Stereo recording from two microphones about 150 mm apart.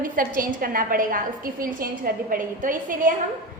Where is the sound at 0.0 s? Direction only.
65° right (ahead or behind).